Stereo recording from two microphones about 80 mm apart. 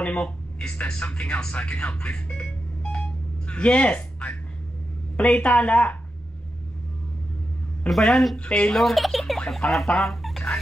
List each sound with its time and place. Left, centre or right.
0.0 s a woman's voice: centre
7.9 s a woman's voice: centre
8.7 s speech: centre